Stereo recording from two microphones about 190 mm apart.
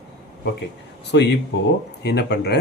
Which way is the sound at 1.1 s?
60° left (ahead or behind).